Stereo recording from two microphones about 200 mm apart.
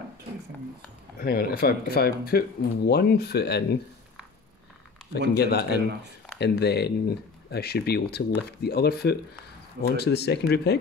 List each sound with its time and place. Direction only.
1.2 s speech: 50° left (ahead or behind)
5.3 s speech: 55° left (ahead or behind)